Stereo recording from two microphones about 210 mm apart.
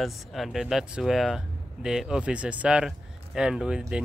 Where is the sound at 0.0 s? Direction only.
Centre (ahead or behind).